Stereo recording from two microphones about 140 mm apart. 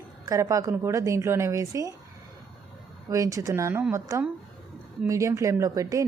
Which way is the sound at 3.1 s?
25° right (ahead or behind).